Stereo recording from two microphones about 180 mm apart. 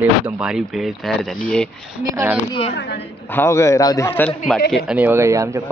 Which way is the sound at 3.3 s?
15° left (ahead or behind).